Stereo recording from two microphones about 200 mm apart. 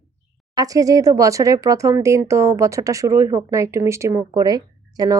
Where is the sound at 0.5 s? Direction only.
20° right (ahead or behind).